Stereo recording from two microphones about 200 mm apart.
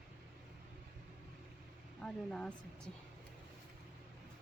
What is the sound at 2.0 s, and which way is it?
Speech, 5° left (ahead or behind).